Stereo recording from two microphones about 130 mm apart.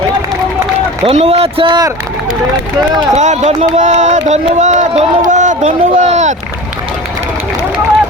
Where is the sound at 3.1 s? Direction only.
65° right (ahead or behind).